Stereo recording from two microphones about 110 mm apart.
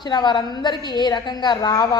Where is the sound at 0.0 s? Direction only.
40° left (ahead or behind).